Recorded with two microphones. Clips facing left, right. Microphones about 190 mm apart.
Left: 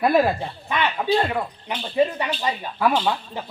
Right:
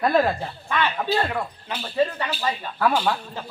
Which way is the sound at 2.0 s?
15° left (ahead or behind).